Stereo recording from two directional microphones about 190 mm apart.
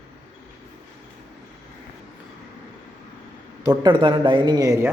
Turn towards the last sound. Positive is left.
turn(degrees=-15)  # may be behind; listen again after turning